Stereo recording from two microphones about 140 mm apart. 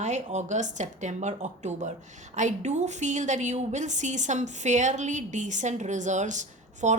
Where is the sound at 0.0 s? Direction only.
55° right (ahead or behind).